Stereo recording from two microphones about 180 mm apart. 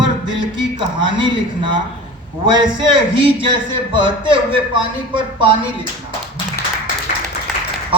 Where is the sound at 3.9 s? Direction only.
25° right (ahead or behind).